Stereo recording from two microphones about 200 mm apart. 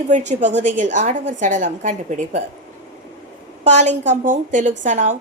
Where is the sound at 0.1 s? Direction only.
35° right (ahead or behind).